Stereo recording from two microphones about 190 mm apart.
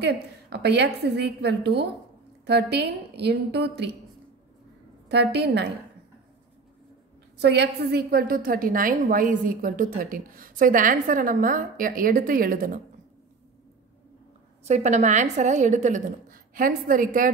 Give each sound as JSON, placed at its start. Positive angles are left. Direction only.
{"t": 0.0, "sound": "a woman's voice", "side_deg": -60}
{"t": 5.0, "sound": "a woman's voice", "side_deg": -60}
{"t": 7.3, "sound": "a woman's voice", "side_deg": -60}
{"t": 14.6, "sound": "a woman's voice", "side_deg": -35}